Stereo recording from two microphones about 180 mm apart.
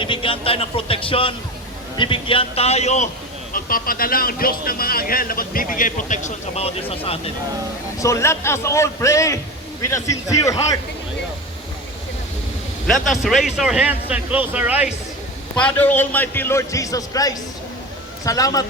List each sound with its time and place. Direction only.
0.0 s a man's voice: 30° left (ahead or behind)
3.5 s a man's voice: 50° left (ahead or behind); by 7.2 s 30° left (ahead or behind)
7.9 s a man's voice: 15° left (ahead or behind)
12.9 s speech: centre (ahead or behind)
15.5 s a man's voice: 10° left (ahead or behind)